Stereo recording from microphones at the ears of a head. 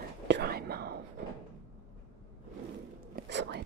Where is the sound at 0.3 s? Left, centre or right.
Right.